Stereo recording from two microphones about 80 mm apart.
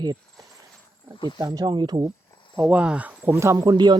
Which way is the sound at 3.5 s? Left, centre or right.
Right.